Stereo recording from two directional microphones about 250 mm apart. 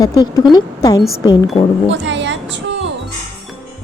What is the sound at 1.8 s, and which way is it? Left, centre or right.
Music, right.